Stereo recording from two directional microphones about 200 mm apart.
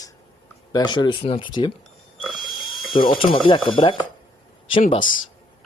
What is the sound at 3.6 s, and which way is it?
Speech, 25° left (ahead or behind).